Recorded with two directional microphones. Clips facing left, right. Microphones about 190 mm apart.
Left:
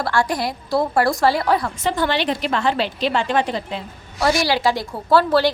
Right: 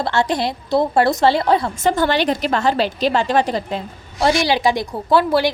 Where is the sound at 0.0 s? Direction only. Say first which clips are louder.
Right 2 dB; 25° right (ahead or behind).